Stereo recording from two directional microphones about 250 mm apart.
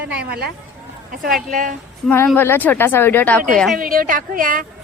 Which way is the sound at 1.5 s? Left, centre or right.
Right.